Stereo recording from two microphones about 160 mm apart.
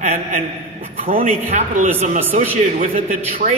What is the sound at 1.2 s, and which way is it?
Speech, 45° right (ahead or behind).